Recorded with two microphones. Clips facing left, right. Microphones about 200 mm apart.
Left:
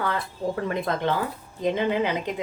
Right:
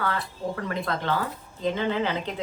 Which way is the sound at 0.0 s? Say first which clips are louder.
Left 2 dB; 20° left (ahead or behind).